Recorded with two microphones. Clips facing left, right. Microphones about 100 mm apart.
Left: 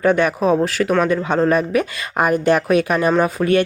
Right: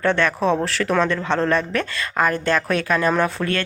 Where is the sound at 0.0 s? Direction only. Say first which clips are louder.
Left 3 dB; 10° left (ahead or behind).